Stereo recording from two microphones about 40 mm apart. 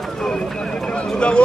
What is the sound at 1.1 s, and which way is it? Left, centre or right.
Speech, left.